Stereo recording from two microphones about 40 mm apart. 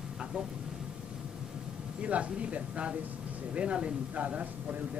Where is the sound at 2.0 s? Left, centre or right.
Right.